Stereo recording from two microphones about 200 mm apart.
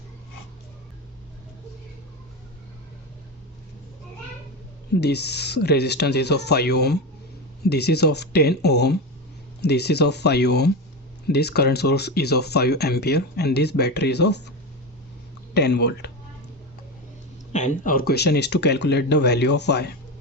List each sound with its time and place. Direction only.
4.9 s speech: 55° left (ahead or behind)
15.5 s speech: 55° left (ahead or behind)
17.5 s speech: 35° left (ahead or behind); by 19.9 s 55° left (ahead or behind)